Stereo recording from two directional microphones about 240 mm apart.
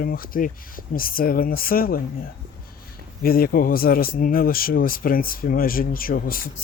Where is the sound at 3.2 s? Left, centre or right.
Left.